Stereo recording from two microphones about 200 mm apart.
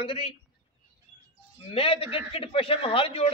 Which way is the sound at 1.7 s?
30° left (ahead or behind).